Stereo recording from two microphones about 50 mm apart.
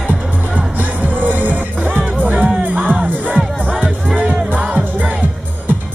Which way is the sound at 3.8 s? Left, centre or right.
Right.